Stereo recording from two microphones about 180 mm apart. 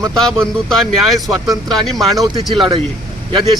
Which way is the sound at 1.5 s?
20° right (ahead or behind).